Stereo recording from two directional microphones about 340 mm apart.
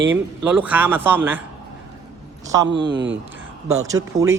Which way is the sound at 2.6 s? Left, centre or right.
Right.